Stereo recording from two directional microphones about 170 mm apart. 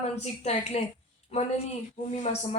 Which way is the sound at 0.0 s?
40° left (ahead or behind).